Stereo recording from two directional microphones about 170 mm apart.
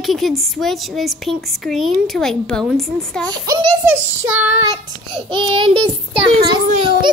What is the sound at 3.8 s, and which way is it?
Child singing, 10° right (ahead or behind).